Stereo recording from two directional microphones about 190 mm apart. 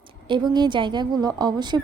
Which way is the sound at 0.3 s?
25° right (ahead or behind).